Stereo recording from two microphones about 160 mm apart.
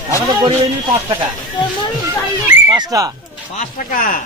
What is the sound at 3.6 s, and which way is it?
Speech, 60° left (ahead or behind).